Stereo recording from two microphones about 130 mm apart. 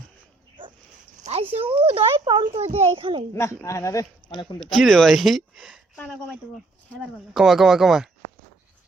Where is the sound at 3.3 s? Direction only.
20° left (ahead or behind).